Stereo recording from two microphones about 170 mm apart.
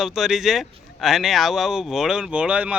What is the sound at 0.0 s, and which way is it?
Speech, centre (ahead or behind).